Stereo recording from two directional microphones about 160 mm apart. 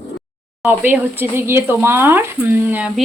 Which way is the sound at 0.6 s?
10° right (ahead or behind).